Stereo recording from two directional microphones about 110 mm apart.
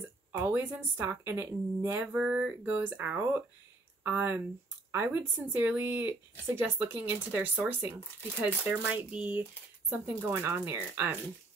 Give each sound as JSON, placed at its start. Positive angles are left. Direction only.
{"t": 0.3, "sound": "speech", "side_deg": -20}
{"t": 2.1, "sound": "speech", "side_deg": -10}